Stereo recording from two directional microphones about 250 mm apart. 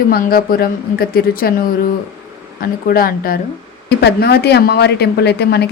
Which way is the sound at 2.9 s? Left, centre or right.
Left.